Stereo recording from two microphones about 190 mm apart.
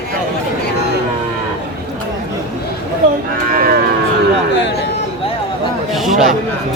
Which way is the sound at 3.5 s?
50° right (ahead or behind).